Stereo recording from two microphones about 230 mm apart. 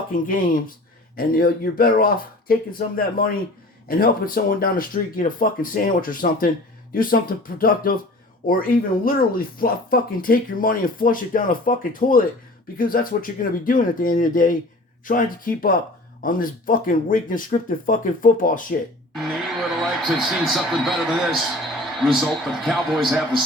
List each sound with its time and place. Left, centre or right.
0.1 s speech: left
19.1 s a sound: centre
20.1 s a man's voice: centre